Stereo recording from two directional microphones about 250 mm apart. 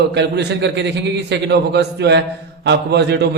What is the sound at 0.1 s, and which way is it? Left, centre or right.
A man's voice, right.